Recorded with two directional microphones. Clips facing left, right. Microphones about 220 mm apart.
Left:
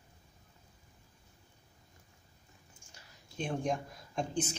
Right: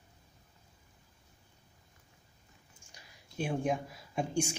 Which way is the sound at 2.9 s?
10° right (ahead or behind).